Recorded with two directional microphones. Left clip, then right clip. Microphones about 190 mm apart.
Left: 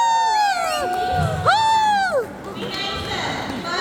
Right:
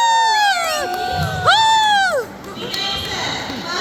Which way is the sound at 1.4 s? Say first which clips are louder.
Right 4 dB; 5° left (ahead or behind).